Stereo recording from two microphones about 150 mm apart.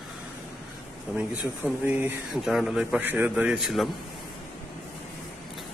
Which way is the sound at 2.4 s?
Centre (ahead or behind).